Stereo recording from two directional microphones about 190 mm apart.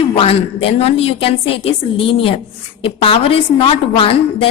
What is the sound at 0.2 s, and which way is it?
A woman's voice, 30° left (ahead or behind).